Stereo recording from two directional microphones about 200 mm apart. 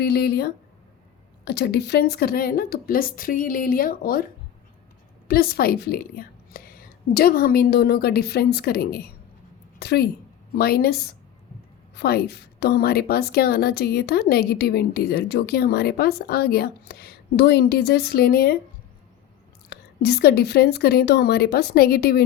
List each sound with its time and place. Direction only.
0.0 s a woman's voice: 55° left (ahead or behind)
5.3 s a woman's voice: 50° left (ahead or behind)
11.9 s a woman's voice: 55° left (ahead or behind)
19.7 s a woman's voice: 55° left (ahead or behind)